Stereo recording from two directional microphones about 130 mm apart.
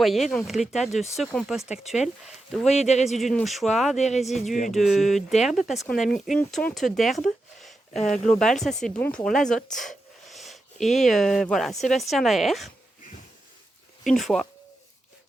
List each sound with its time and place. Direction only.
0.0 s speech: centre (ahead or behind)
2.6 s speech: 60° left (ahead or behind)
3.2 s speech: centre (ahead or behind)
3.9 s speech: 60° left (ahead or behind)
4.2 s speech: centre (ahead or behind)
9.0 s speech: 15° left (ahead or behind)
10.2 s a sound: centre (ahead or behind)
11.5 s speech: centre (ahead or behind)
14.0 s speech: centre (ahead or behind)